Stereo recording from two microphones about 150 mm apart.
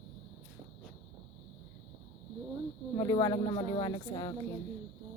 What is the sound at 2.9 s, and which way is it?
Speech, 25° left (ahead or behind).